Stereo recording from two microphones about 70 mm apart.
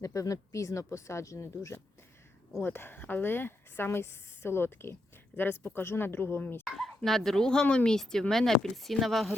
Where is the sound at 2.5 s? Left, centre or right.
Left.